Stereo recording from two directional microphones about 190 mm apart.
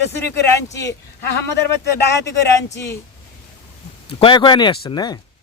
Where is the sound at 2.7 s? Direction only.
15° left (ahead or behind).